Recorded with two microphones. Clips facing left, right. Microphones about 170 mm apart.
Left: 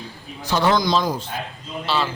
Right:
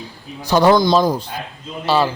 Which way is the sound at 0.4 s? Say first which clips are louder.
Right 6 dB; 40° right (ahead or behind).